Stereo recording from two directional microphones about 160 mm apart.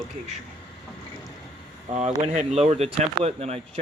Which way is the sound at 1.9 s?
45° right (ahead or behind).